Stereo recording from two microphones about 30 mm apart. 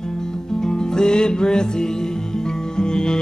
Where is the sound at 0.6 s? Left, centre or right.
Left.